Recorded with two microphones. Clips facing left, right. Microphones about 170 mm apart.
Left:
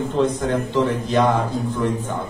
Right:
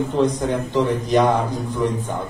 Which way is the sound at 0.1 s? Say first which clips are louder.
Left 2 dB; 15° right (ahead or behind).